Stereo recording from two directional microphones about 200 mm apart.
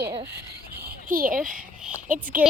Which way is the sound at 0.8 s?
45° right (ahead or behind).